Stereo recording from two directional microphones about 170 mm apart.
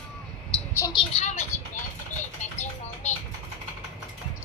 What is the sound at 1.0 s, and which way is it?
Speech, 40° left (ahead or behind).